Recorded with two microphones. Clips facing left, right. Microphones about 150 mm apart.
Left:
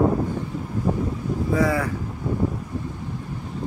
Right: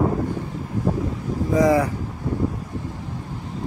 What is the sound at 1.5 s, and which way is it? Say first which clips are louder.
Speech: right 5 dB; 20° right (ahead or behind).